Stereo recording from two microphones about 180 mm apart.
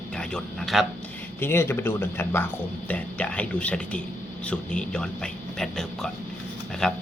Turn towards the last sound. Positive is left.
turn(degrees=5)  # may be behind; listen again after turning